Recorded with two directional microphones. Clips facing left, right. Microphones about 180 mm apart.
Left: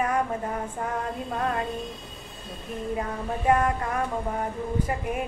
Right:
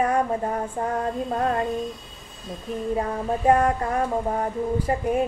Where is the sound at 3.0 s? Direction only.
35° right (ahead or behind).